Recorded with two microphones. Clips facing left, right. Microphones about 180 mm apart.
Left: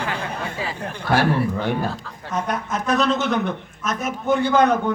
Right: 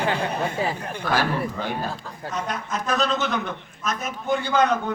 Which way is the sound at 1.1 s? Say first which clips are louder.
Left 5 dB; 60° left (ahead or behind).